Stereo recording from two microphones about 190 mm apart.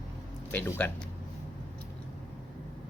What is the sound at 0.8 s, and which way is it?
Speech, 5° left (ahead or behind).